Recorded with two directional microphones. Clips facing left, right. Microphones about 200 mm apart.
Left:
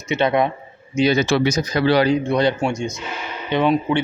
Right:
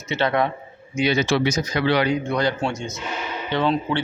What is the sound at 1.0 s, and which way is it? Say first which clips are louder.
Speech: left 3 dB; 40° left (ahead or behind).